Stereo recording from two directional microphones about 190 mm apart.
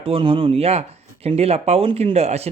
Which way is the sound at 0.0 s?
30° right (ahead or behind).